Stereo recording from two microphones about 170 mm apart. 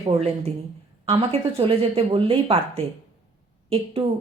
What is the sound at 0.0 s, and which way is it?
Speech, 35° right (ahead or behind).